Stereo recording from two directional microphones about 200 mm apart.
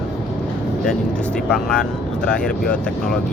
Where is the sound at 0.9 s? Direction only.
5° left (ahead or behind).